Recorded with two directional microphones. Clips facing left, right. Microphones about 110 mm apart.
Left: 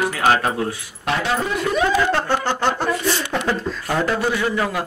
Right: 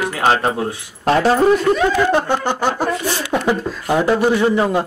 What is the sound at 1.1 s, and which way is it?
Speech, 40° right (ahead or behind).